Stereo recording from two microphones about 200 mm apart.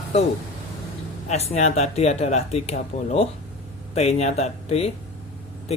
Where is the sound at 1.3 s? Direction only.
35° left (ahead or behind).